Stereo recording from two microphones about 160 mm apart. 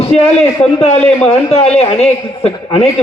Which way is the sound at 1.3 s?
40° left (ahead or behind).